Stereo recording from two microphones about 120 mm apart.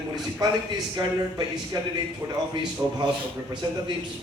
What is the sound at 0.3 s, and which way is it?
A man's voice, 35° right (ahead or behind).